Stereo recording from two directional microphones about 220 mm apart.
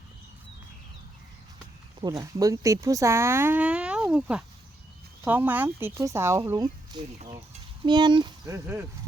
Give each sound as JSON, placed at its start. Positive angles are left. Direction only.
{"t": 2.0, "sound": "speech", "side_deg": -15}